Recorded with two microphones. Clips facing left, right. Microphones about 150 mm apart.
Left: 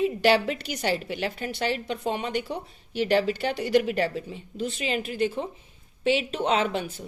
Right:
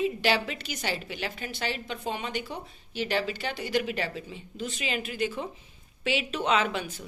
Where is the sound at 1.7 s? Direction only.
50° left (ahead or behind).